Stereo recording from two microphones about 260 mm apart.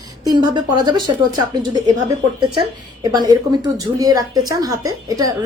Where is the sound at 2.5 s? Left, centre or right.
Centre.